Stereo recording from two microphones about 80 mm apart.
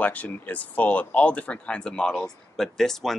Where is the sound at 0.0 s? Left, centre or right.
Centre.